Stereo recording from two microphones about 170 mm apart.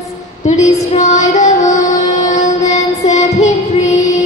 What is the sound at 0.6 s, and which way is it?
Female singing, 20° left (ahead or behind).